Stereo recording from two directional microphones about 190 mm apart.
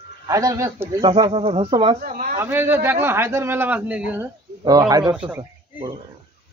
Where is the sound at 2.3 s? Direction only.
10° right (ahead or behind).